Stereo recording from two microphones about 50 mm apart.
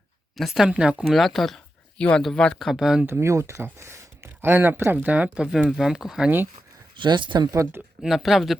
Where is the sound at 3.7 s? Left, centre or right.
Right.